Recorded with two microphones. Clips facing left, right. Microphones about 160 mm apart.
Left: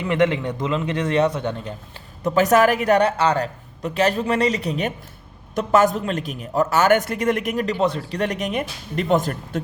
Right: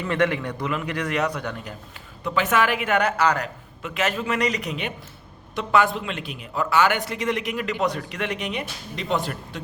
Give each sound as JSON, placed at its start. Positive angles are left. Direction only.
{"t": 0.0, "sound": "a man's voice", "side_deg": 20}
{"t": 2.2, "sound": "a man's voice", "side_deg": 40}
{"t": 8.2, "sound": "a man's voice", "side_deg": 45}